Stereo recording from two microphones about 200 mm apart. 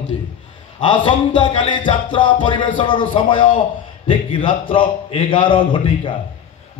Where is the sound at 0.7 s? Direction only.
25° left (ahead or behind).